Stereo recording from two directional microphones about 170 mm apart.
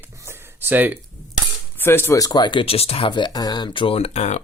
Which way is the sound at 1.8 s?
15° left (ahead or behind).